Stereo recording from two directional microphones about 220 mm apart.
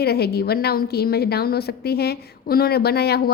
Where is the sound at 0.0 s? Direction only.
45° left (ahead or behind).